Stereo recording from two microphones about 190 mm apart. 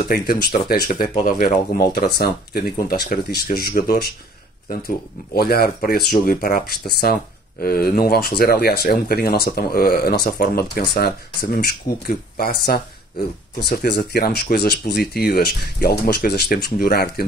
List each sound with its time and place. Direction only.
0.0 s speech: 55° left (ahead or behind)
2.0 s speech: 55° left (ahead or behind)
13.9 s speech: 55° left (ahead or behind)